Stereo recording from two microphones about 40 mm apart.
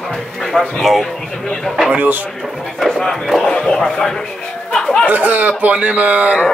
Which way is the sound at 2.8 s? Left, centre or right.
Centre.